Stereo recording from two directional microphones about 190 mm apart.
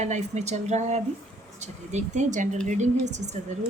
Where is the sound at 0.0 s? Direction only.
35° right (ahead or behind).